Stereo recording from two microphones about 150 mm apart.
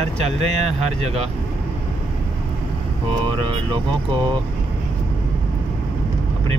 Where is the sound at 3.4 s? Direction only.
30° right (ahead or behind).